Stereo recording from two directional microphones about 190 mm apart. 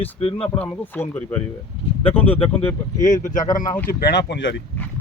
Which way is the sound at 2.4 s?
10° left (ahead or behind).